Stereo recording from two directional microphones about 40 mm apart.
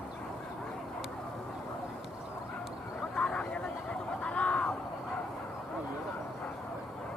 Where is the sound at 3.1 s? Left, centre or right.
Left.